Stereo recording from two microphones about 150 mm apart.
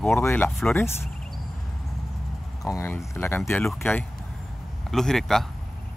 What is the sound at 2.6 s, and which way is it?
Speech, 20° left (ahead or behind).